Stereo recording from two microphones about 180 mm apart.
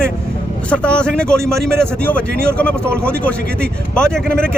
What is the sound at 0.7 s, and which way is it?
Speech, 5° left (ahead or behind).